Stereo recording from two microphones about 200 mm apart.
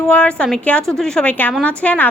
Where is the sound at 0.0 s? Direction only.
5° left (ahead or behind).